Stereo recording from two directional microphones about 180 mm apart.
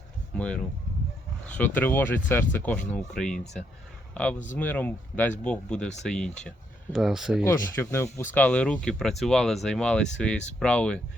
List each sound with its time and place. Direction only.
0.3 s a man's voice: 5° left (ahead or behind)
7.4 s speech: 15° left (ahead or behind)